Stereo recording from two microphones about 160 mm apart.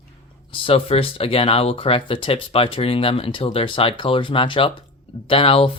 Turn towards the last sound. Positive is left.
turn(degrees=35)  # may be behind; listen again after turning